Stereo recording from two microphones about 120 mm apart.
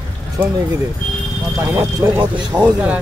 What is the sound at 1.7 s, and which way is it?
Speech, 20° right (ahead or behind).